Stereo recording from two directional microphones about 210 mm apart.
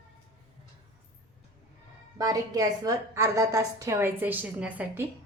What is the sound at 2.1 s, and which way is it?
A woman's voice, 15° right (ahead or behind).